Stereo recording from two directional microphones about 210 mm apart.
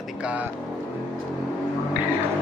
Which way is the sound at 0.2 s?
5° right (ahead or behind).